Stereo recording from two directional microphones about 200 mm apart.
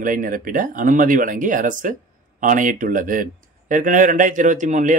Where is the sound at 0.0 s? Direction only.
45° right (ahead or behind).